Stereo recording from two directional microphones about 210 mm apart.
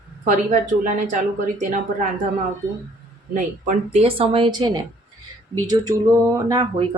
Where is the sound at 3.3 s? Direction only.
35° right (ahead or behind).